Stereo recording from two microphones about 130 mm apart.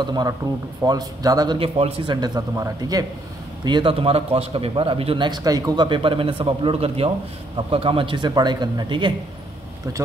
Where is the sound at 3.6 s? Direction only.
40° right (ahead or behind).